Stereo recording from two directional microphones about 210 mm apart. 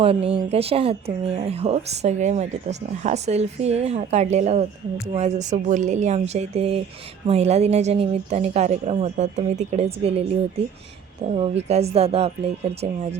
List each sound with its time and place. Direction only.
0.0 s a woman's voice: 25° right (ahead or behind)
11.3 s speech: 30° right (ahead or behind)